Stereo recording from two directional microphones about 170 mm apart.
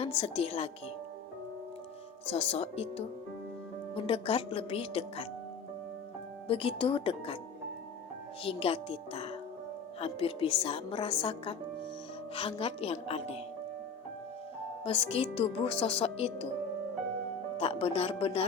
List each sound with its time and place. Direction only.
0.0 s speech: 35° left (ahead or behind)
2.2 s speech: 35° left (ahead or behind)
6.5 s speech: 35° left (ahead or behind)
8.4 s speech: 35° left (ahead or behind)
14.8 s speech: 35° left (ahead or behind)
17.6 s speech: 35° left (ahead or behind)